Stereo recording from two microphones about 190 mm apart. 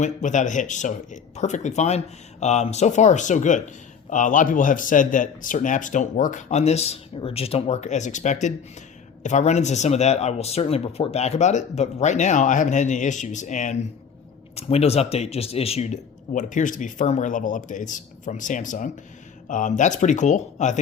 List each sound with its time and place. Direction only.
0.0 s speech: 40° left (ahead or behind)